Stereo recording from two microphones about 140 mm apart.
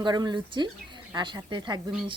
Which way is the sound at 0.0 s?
30° right (ahead or behind).